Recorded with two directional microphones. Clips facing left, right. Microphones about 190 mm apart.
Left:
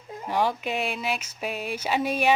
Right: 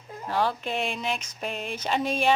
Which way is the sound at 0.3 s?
15° left (ahead or behind).